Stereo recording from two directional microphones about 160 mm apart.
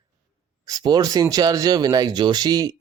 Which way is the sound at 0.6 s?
25° right (ahead or behind).